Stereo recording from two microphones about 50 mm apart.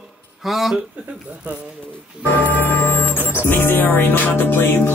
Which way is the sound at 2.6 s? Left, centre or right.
Left.